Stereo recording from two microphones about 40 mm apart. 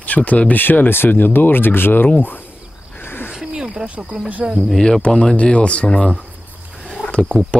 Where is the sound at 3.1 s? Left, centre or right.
Left.